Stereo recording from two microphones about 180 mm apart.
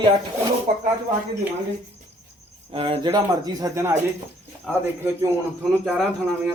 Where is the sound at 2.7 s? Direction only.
30° right (ahead or behind).